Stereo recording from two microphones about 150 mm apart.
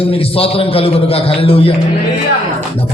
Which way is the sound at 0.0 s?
40° left (ahead or behind).